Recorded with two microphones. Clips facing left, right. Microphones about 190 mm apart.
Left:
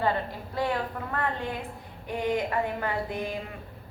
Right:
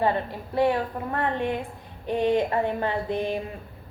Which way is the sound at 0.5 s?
25° right (ahead or behind).